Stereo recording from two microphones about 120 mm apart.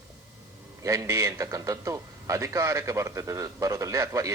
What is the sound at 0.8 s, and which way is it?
A man's voice, 25° right (ahead or behind).